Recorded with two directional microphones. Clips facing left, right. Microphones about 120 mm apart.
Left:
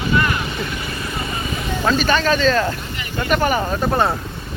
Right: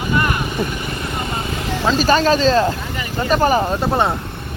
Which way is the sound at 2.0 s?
35° right (ahead or behind).